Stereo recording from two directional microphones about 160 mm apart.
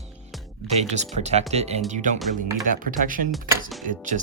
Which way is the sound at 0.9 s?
45° right (ahead or behind).